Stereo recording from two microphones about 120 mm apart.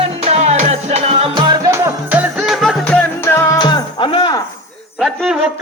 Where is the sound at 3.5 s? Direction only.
40° left (ahead or behind).